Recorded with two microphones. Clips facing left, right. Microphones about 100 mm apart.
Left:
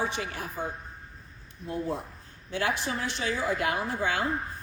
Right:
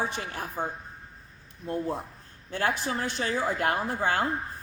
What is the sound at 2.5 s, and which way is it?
Speech, 45° right (ahead or behind).